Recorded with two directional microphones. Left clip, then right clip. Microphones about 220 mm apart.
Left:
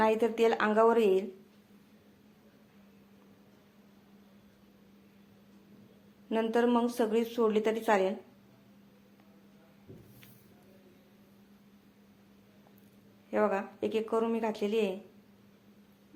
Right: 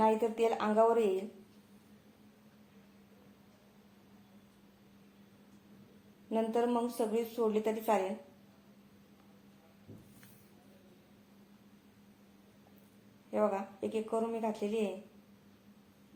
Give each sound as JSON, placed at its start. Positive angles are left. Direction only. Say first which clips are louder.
{"t": 0.0, "sound": "a woman's voice", "louder": "left 3 dB", "side_deg": 30}
{"t": 6.3, "sound": "a woman's voice", "louder": "left 4 dB", "side_deg": 30}
{"t": 13.3, "sound": "a woman's voice", "louder": "left 3 dB", "side_deg": 30}